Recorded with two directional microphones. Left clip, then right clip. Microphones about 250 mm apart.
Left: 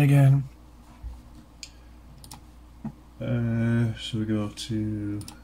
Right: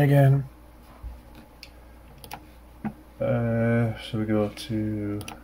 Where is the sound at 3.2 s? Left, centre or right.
Centre.